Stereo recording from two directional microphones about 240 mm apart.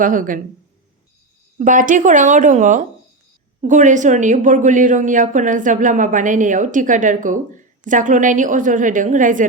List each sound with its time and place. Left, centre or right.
0.0 s a woman's voice: right
1.5 s a woman's voice: right